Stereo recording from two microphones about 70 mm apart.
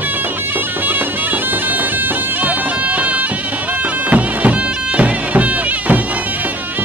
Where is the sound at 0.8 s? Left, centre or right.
Right.